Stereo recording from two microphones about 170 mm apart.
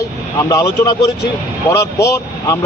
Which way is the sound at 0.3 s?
20° left (ahead or behind).